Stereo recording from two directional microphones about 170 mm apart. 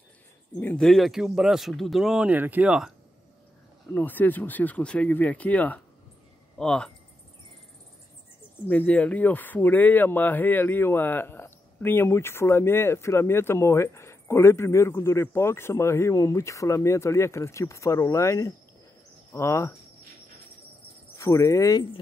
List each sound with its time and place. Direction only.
0.6 s speech: 10° left (ahead or behind)
3.9 s speech: 10° left (ahead or behind)
8.6 s speech: 10° left (ahead or behind)
21.2 s speech: 15° left (ahead or behind)